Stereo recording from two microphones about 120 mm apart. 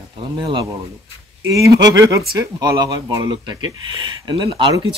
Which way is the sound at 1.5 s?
30° right (ahead or behind).